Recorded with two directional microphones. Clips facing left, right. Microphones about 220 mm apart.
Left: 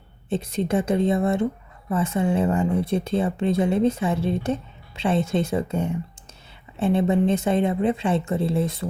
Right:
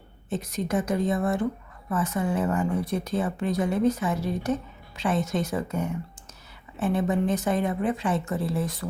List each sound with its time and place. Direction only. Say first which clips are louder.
0.3 s speech: left 4 dB; 30° left (ahead or behind)